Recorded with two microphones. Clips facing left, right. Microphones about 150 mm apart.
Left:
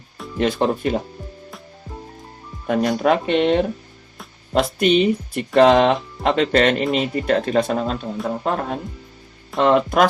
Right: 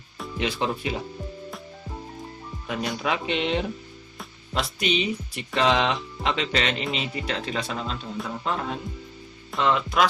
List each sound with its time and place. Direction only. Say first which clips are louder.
0.3 s music: left 8 dB; 50° left (ahead or behind)
2.6 s music: left 10 dB; 50° left (ahead or behind)